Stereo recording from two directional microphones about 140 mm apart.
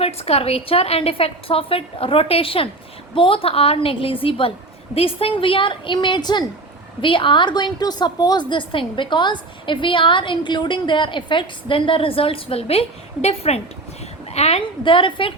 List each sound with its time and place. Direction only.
0.0 s a woman's voice: 45° left (ahead or behind)